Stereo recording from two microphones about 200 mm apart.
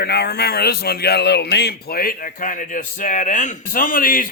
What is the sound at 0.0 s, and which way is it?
Speech, 55° left (ahead or behind).